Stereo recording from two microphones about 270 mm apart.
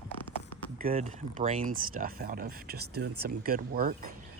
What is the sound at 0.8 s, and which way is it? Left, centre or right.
Speech, right.